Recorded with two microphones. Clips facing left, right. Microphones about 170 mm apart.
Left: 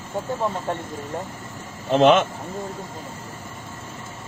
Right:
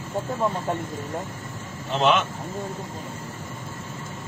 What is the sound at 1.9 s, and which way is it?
Speech, 45° left (ahead or behind).